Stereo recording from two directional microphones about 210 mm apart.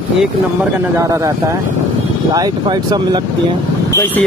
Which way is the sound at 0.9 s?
15° right (ahead or behind).